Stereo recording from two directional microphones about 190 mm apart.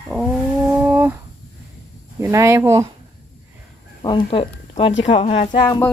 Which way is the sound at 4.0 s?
25° left (ahead or behind).